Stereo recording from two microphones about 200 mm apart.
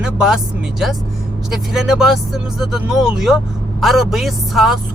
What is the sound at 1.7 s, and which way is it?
Speech, centre (ahead or behind).